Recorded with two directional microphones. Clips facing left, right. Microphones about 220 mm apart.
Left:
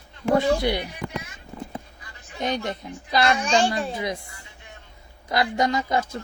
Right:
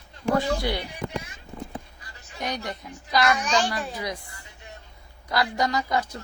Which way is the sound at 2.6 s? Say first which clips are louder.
Left 4 dB; 25° left (ahead or behind).